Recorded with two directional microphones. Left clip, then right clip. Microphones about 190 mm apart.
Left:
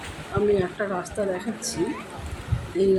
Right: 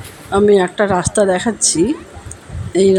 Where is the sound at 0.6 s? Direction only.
45° right (ahead or behind).